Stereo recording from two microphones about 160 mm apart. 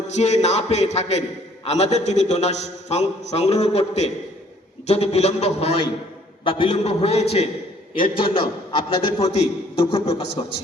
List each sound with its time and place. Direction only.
0.1 s a man's voice: 45° left (ahead or behind)